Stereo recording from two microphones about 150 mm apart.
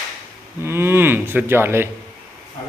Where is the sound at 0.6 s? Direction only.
15° right (ahead or behind).